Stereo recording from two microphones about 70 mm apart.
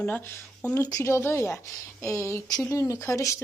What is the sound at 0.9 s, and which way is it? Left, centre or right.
Speech, left.